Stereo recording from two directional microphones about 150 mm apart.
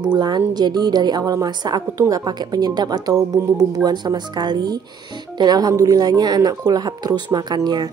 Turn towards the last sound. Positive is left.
turn(degrees=-25)  # may be behind; listen again after turning